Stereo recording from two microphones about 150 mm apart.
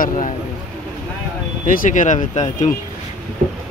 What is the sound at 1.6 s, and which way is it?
Speech, 60° left (ahead or behind).